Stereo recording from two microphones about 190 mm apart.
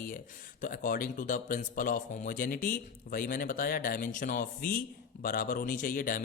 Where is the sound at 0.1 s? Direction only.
45° left (ahead or behind).